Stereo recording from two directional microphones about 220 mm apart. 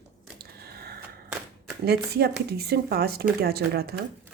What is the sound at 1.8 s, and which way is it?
Speech, 45° right (ahead or behind).